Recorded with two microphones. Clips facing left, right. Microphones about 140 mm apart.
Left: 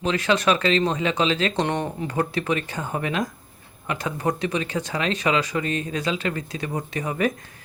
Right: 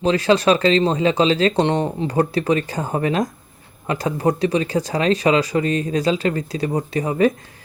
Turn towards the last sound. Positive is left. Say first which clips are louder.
# right 7 dB
turn(degrees=-30)  # may be behind; listen again after turning